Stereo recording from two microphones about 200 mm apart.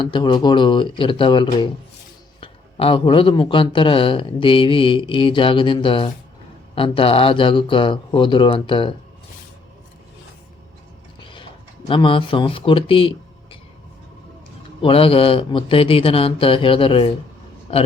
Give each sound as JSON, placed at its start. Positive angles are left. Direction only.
{"t": 0.0, "sound": "a man's voice", "side_deg": 25}
{"t": 11.2, "sound": "mechanisms", "side_deg": 25}
{"t": 11.9, "sound": "speech", "side_deg": 25}
{"t": 14.8, "sound": "a man's voice", "side_deg": 25}